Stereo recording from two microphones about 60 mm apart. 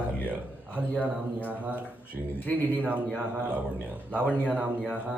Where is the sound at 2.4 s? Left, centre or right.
Left.